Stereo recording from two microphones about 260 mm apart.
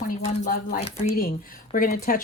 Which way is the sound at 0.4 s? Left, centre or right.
Left.